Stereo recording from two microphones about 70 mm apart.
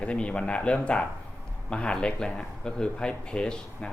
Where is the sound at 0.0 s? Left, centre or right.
Centre.